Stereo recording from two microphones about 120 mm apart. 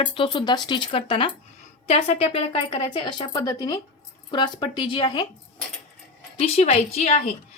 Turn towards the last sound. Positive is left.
turn(degrees=65)  # may be behind; listen again after turning